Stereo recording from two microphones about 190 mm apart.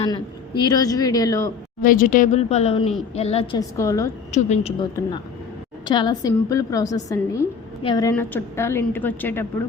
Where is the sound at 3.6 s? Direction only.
15° left (ahead or behind).